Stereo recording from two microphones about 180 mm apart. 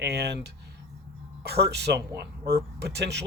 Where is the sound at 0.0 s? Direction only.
65° right (ahead or behind).